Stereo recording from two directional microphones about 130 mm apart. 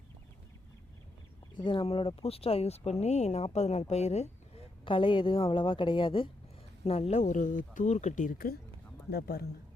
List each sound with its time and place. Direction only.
1.5 s speech: 40° left (ahead or behind); by 4.3 s 55° left (ahead or behind)
4.9 s a woman's voice: 40° left (ahead or behind)
6.8 s speech: 55° left (ahead or behind); by 8.4 s 85° left